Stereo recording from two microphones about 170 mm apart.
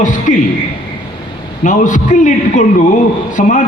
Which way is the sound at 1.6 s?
50° left (ahead or behind).